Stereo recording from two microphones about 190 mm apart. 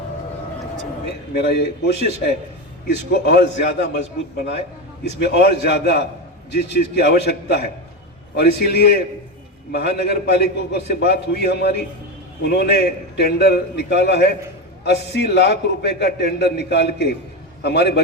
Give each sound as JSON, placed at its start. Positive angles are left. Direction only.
{"t": 1.0, "sound": "a man's voice", "side_deg": 60}
{"t": 2.8, "sound": "a man's voice", "side_deg": 60}
{"t": 5.2, "sound": "a man's voice", "side_deg": 60}